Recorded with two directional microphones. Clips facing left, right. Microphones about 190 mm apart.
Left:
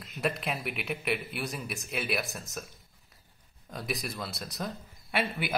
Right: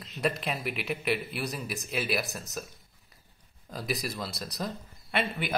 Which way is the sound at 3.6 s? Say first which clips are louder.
Right 2 dB; centre (ahead or behind).